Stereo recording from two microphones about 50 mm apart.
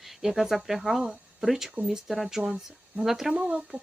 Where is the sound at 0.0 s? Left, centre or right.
Centre.